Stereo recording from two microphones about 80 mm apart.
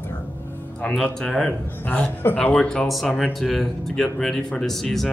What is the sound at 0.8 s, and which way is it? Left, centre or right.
Speech, centre.